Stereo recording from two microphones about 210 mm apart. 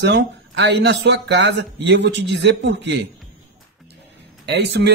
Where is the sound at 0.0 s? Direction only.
55° right (ahead or behind).